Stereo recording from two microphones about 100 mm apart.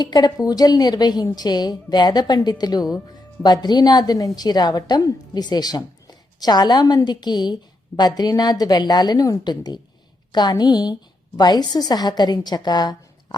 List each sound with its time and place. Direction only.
0.0 s a woman's voice: 45° left (ahead or behind)